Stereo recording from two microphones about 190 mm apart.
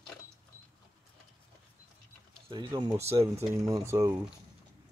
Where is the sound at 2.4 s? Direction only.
25° right (ahead or behind).